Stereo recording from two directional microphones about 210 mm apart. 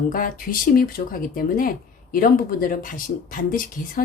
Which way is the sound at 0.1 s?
40° left (ahead or behind).